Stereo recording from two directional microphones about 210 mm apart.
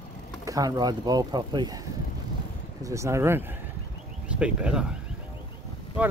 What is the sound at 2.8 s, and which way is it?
Speech, 15° right (ahead or behind).